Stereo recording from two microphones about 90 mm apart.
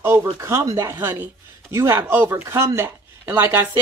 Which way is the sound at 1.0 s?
25° right (ahead or behind).